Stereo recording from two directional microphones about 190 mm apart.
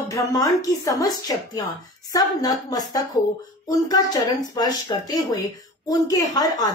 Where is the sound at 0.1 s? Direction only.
20° left (ahead or behind).